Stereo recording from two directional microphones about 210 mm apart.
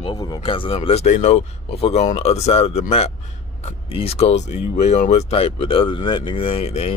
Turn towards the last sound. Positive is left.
turn(degrees=30)  # may be behind; listen again after turning